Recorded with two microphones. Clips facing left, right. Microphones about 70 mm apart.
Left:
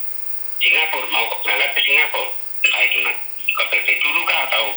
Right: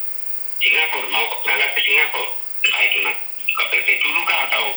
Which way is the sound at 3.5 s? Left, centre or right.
Left.